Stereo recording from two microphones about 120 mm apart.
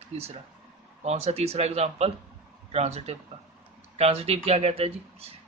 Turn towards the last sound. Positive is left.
turn(degrees=-55)  # may be behind; listen again after turning